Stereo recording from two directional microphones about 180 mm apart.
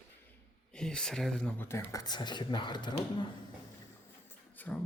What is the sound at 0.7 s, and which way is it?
Speech, 5° left (ahead or behind).